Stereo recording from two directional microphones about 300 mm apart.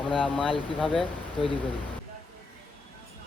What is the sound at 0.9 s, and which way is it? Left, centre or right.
Speech, centre.